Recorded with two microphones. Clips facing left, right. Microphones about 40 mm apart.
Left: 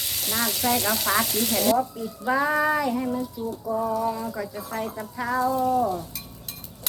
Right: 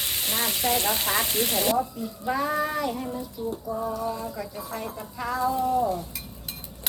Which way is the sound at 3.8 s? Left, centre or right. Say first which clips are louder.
Left 5 dB; left.